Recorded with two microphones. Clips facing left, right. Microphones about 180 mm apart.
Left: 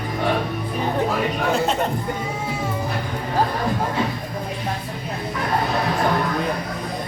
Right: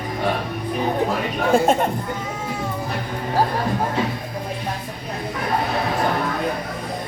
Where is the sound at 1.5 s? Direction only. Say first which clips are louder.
Right 10 dB; 50° right (ahead or behind).